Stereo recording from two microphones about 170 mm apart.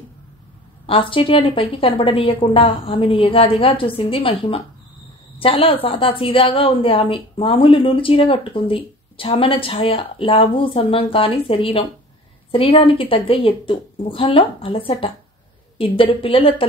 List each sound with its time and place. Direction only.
0.8 s a woman's voice: 30° left (ahead or behind)